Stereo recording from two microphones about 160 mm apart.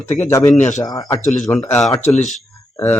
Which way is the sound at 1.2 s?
50° left (ahead or behind).